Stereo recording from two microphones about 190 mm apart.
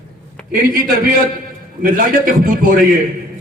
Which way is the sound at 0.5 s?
50° right (ahead or behind).